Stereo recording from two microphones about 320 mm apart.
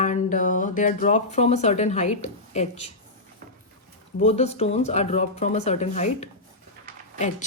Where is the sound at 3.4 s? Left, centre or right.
Right.